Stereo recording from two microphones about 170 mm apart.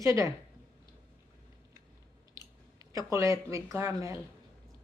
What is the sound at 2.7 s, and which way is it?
Speech, 20° right (ahead or behind).